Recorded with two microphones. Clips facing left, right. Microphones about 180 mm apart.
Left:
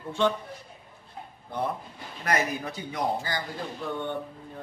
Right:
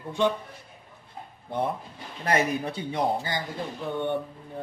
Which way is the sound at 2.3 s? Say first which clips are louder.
Right 3 dB; 30° right (ahead or behind).